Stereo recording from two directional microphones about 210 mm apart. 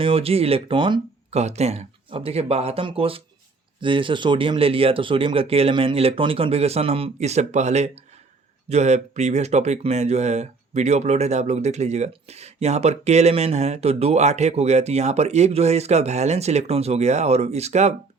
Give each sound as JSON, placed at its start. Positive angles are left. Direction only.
{"t": 0.0, "sound": "speech", "side_deg": -25}